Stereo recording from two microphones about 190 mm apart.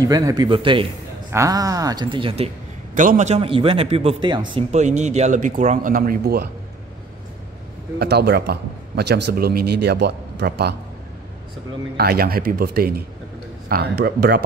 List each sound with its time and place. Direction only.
0.0 s speech: 20° right (ahead or behind)
2.9 s a man's voice: 45° right (ahead or behind)
8.0 s a man's voice: 60° right (ahead or behind)
12.0 s a man's voice: 55° right (ahead or behind)